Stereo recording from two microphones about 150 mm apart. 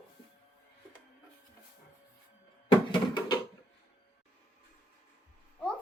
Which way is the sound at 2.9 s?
30° left (ahead or behind).